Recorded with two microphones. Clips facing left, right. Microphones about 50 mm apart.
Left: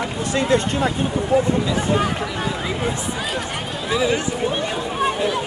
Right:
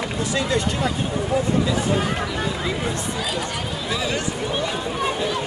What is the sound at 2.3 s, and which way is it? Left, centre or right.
Speech, centre.